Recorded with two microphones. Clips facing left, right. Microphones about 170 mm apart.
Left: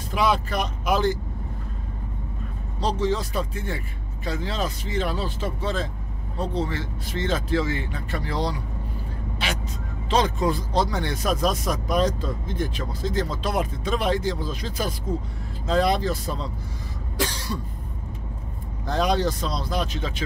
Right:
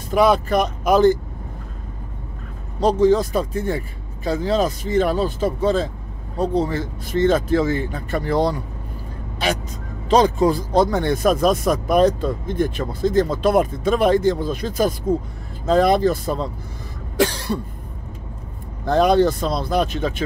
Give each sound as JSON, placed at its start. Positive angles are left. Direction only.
{"t": 0.1, "sound": "speech", "side_deg": -50}
{"t": 2.8, "sound": "speech", "side_deg": -50}
{"t": 10.0, "sound": "speech", "side_deg": -35}
{"t": 10.7, "sound": "speech", "side_deg": -50}
{"t": 18.9, "sound": "speech", "side_deg": -55}